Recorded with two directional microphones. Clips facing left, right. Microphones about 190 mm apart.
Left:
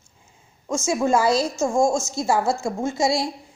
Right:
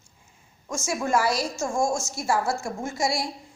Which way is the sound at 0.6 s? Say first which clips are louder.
Left 6 dB; 20° left (ahead or behind).